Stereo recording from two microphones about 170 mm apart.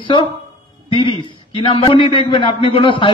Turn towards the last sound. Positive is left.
turn(degrees=30)  # may be behind; listen again after turning